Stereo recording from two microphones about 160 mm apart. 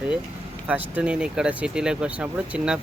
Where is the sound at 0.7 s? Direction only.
10° right (ahead or behind).